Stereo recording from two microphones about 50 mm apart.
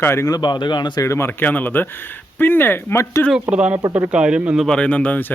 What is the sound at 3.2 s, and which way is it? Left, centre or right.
Speech, left.